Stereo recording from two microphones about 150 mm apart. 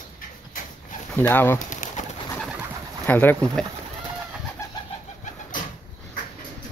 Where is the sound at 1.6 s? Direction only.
55° left (ahead or behind).